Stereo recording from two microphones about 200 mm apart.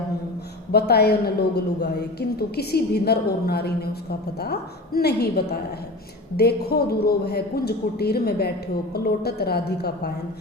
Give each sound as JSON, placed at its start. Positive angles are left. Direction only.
{"t": 0.7, "sound": "speech", "side_deg": 55}